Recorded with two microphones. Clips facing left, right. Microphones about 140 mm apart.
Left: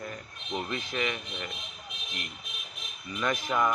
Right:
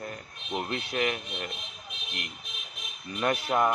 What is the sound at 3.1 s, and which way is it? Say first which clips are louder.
Speech: right 3 dB; 35° right (ahead or behind).